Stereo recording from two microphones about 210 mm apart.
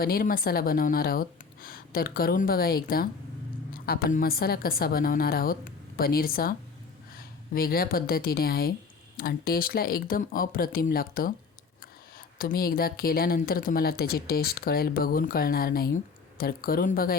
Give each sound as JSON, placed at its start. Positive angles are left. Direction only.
{"t": 0.0, "sound": "speech", "side_deg": 45}